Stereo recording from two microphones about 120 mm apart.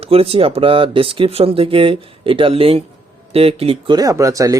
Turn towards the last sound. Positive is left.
turn(degrees=-30)  # may be behind; listen again after turning